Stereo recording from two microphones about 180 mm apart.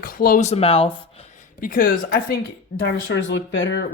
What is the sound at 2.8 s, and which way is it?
Speech, 90° left.